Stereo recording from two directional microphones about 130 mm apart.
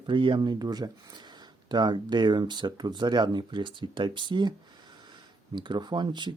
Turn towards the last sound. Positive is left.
turn(degrees=-35)  # may be behind; listen again after turning